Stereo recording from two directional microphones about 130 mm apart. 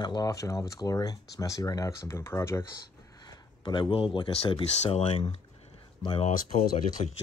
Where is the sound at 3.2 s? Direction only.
35° left (ahead or behind).